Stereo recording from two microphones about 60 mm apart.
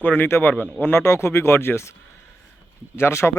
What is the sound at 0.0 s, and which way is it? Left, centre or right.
Speech, left.